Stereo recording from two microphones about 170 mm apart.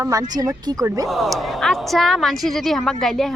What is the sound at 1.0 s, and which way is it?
A woman's voice, centre (ahead or behind).